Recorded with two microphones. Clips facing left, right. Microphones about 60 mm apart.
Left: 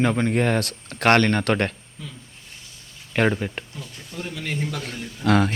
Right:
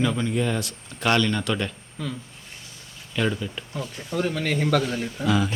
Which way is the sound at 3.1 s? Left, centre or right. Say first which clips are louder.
Left 4 dB; left.